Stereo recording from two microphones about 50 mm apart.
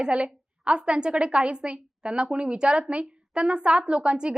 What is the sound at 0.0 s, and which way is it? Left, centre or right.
A woman's voice, right.